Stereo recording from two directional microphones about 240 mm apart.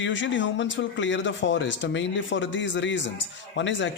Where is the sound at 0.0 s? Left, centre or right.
Left.